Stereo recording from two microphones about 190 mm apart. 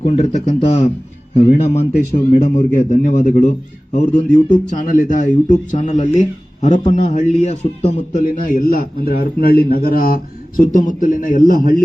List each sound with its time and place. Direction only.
0.0 s a man's voice: 35° left (ahead or behind)